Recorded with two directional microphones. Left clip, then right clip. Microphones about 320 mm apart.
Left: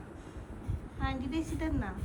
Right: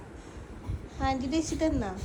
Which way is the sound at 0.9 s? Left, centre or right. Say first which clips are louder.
Right 7 dB; centre.